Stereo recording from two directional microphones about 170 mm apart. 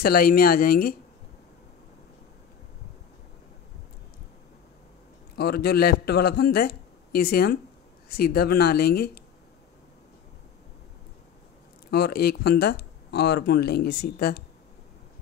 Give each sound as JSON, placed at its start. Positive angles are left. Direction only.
{"t": 0.0, "sound": "speech", "side_deg": 60}
{"t": 5.3, "sound": "speech", "side_deg": 65}
{"t": 11.9, "sound": "speech", "side_deg": 65}